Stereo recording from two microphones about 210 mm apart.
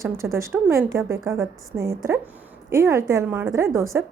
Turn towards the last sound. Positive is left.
turn(degrees=-15)  # may be behind; listen again after turning